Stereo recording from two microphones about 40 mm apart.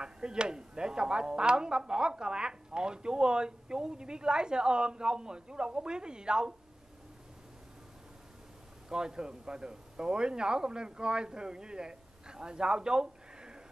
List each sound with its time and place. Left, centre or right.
0.0 s speech: right
8.8 s speech: centre